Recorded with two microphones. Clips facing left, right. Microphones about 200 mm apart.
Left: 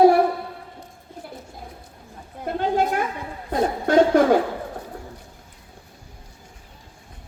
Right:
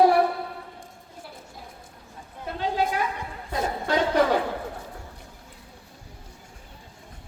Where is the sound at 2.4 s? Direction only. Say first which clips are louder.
Left 5 dB; 50° left (ahead or behind).